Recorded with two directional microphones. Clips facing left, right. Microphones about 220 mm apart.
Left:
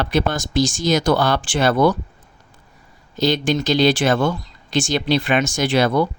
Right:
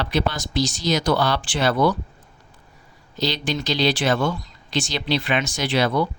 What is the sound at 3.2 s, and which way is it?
Speech, 50° left (ahead or behind).